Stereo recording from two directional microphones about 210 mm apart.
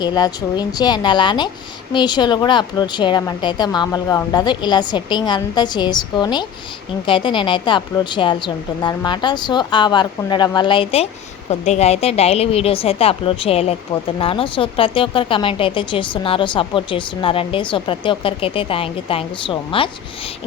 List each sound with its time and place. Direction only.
0.0 s a woman's voice: 20° left (ahead or behind)